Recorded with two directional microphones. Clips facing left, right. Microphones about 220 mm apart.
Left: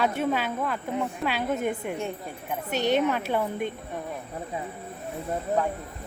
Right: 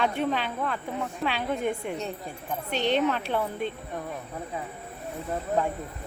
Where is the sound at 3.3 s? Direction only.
10° left (ahead or behind).